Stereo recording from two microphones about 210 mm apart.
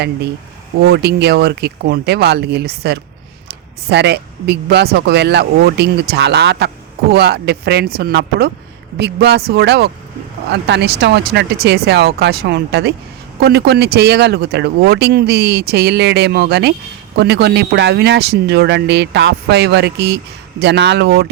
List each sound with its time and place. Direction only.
0.9 s speech: 50° right (ahead or behind)